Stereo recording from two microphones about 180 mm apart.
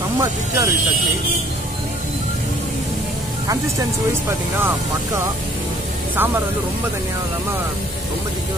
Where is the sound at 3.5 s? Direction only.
15° right (ahead or behind).